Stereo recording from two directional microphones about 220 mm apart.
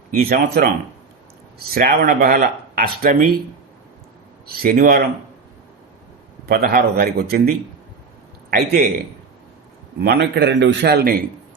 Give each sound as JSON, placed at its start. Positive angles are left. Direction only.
{"t": 0.1, "sound": "speech", "side_deg": -40}
{"t": 4.4, "sound": "a man's voice", "side_deg": -40}
{"t": 6.4, "sound": "a man's voice", "side_deg": -45}
{"t": 10.0, "sound": "a man's voice", "side_deg": -50}